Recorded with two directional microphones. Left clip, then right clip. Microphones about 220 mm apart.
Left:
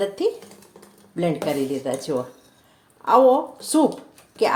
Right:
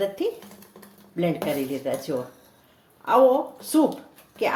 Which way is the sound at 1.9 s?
25° left (ahead or behind).